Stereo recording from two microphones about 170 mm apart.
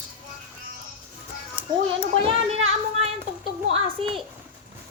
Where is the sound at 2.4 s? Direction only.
35° right (ahead or behind).